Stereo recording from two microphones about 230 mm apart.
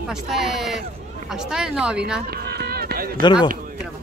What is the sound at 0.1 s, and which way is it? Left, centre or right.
Speech, centre.